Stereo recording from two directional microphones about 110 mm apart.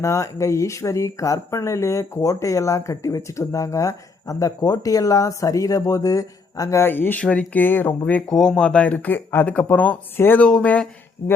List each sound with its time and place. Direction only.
0.0 s speech: 25° left (ahead or behind)